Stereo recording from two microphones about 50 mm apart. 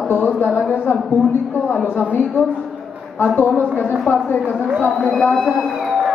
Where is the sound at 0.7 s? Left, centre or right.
Left.